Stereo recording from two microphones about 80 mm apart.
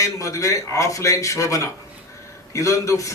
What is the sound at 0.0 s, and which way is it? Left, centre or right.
A man's voice, left.